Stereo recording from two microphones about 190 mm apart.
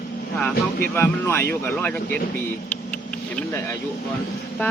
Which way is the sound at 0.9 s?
10° left (ahead or behind).